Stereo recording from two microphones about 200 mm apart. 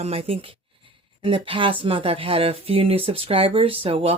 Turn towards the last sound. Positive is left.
turn(degrees=-25)  # may be behind; listen again after turning